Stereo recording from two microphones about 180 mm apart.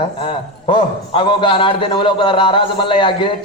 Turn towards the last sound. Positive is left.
turn(degrees=25)  # may be behind; listen again after turning